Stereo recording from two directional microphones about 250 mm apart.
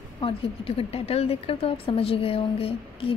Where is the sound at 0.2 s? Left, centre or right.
Left.